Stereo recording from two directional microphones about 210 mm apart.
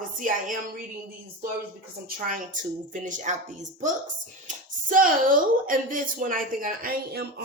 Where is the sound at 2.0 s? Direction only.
40° right (ahead or behind).